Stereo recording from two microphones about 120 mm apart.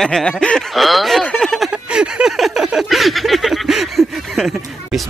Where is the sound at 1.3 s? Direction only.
Centre (ahead or behind).